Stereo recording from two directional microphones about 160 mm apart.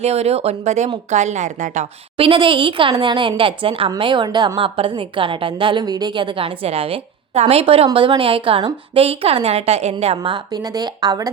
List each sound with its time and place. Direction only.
0.0 s a woman's voice: 40° right (ahead or behind)
10.2 s speech: 30° right (ahead or behind)